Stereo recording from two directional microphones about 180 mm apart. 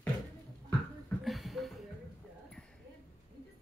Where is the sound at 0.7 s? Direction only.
5° left (ahead or behind).